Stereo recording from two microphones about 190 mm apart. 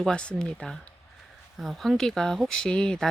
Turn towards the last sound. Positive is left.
turn(degrees=5)  # may be behind; listen again after turning